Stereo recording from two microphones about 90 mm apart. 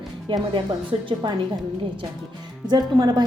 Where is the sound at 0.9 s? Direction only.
90° right.